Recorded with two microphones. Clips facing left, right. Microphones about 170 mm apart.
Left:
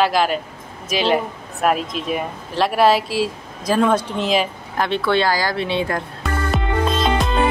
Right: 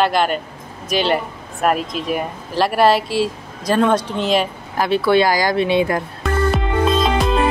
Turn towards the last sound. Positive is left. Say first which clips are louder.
# right 2 dB
turn(degrees=0)  # may be behind; listen again after turning